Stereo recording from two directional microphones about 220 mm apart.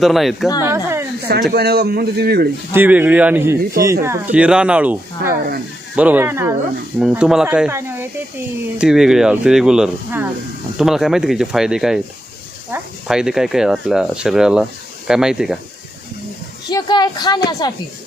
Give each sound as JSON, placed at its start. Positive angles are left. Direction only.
{"t": 0.0, "sound": "speech", "side_deg": 0}
{"t": 0.6, "sound": "speech", "side_deg": -10}
{"t": 1.3, "sound": "a man's voice", "side_deg": -45}
{"t": 2.7, "sound": "speech", "side_deg": -10}
{"t": 16.6, "sound": "speech", "side_deg": 20}